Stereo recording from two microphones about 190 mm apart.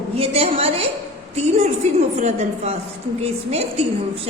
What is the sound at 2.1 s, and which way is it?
Speech, 35° right (ahead or behind).